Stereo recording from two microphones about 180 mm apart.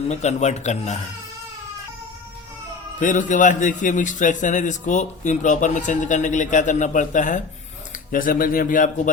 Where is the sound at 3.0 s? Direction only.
45° left (ahead or behind).